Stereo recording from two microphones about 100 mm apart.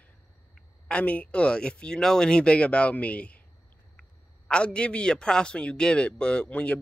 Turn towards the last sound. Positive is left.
turn(degrees=10)  # may be behind; listen again after turning